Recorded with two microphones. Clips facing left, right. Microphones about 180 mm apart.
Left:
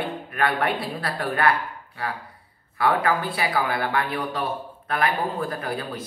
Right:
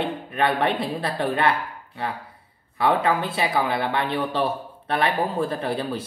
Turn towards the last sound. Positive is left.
turn(degrees=-30)  # may be behind; listen again after turning